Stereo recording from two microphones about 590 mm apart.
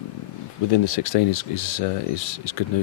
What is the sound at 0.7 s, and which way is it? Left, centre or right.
Speech, left.